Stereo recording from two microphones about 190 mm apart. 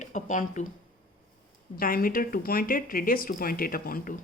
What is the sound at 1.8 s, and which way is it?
Speech, 50° left (ahead or behind).